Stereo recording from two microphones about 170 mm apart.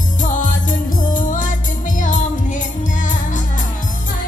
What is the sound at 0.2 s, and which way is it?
Music, 50° left (ahead or behind).